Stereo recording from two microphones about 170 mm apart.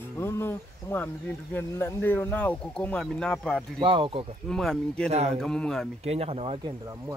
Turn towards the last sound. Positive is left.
turn(degrees=-35)  # may be behind; listen again after turning